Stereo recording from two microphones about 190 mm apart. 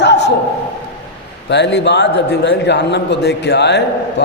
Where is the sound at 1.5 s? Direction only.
65° left (ahead or behind).